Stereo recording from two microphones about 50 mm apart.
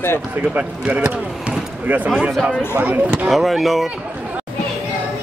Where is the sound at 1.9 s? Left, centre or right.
Right.